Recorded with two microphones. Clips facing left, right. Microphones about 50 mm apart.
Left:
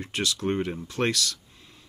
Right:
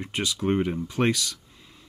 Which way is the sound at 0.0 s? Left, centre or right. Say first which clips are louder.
Right 1 dB; centre.